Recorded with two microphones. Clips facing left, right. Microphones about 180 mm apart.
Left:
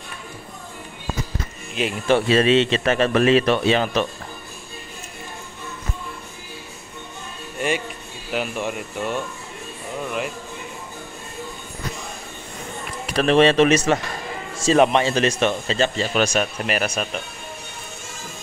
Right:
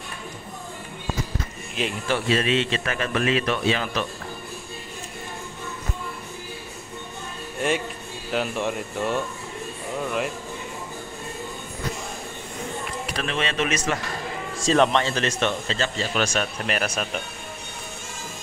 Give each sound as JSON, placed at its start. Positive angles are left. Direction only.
{"t": 1.8, "sound": "speech", "side_deg": 0}
{"t": 2.3, "sound": "speech", "side_deg": 25}
{"t": 7.5, "sound": "music", "side_deg": 0}
{"t": 8.3, "sound": "speech", "side_deg": 5}
{"t": 13.4, "sound": "speech", "side_deg": 35}
{"t": 14.6, "sound": "speech", "side_deg": 10}